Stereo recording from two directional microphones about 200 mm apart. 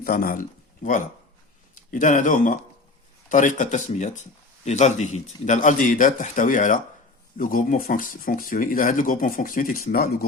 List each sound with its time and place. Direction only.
0.0 s speech: 45° left (ahead or behind)